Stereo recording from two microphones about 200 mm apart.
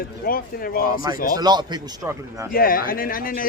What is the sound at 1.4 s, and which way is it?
A man's voice, 20° right (ahead or behind).